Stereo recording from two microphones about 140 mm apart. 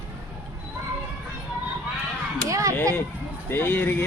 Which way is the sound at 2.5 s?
25° right (ahead or behind).